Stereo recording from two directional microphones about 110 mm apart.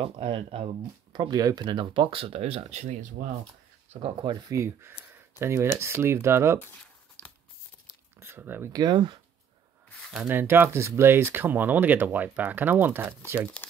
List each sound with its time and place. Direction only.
0.0 s speech: 55° right (ahead or behind)
1.1 s speech: 40° right (ahead or behind); by 3.0 s 90° right
3.9 s speech: 65° right (ahead or behind)
4.3 s speech: 40° right (ahead or behind)
4.6 s speech: 25° right (ahead or behind)
6.6 s a sound: 15° left (ahead or behind)
8.2 s speech: 20° right (ahead or behind)
8.7 s speech: 45° right (ahead or behind)
9.8 s a sound: 10° left (ahead or behind)
10.1 s speech: 15° right (ahead or behind)